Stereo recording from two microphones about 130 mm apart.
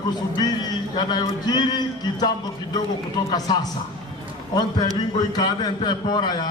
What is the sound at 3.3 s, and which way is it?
Speech, 30° left (ahead or behind).